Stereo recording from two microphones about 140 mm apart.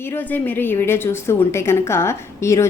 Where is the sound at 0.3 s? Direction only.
15° left (ahead or behind).